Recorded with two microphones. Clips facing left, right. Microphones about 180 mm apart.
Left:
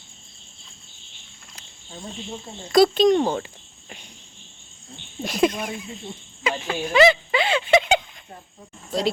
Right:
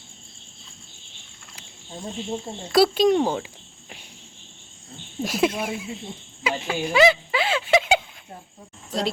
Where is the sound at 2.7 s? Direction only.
5° right (ahead or behind).